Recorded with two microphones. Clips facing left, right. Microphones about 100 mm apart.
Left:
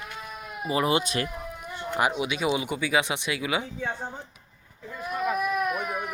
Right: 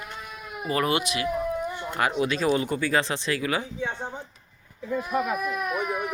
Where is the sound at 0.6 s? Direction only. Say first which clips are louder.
Even; 20° left (ahead or behind).